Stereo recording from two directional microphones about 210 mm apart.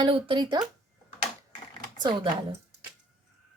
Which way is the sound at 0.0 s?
25° right (ahead or behind).